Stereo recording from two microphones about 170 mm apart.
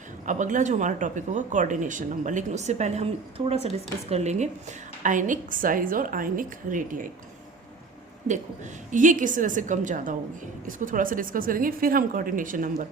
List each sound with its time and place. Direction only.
0.3 s speech: 50° right (ahead or behind)
8.9 s speech: 50° right (ahead or behind)